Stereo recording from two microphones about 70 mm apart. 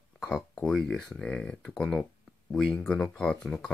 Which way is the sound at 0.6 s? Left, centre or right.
Centre.